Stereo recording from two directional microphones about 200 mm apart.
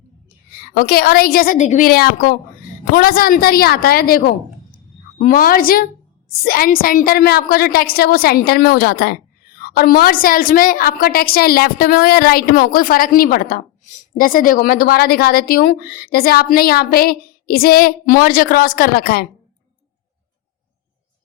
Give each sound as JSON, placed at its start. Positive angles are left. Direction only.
{"t": 0.7, "sound": "a woman's voice", "side_deg": 50}